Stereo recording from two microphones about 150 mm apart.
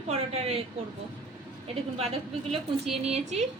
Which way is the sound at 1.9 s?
45° right (ahead or behind).